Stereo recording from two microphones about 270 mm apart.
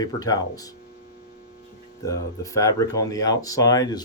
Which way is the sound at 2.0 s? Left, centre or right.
Centre.